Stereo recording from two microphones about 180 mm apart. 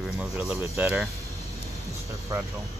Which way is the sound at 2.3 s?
20° right (ahead or behind).